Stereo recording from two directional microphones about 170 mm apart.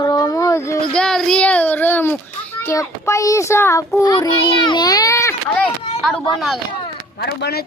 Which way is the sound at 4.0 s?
25° left (ahead or behind).